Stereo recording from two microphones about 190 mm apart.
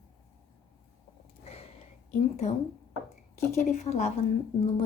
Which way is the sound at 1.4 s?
30° left (ahead or behind).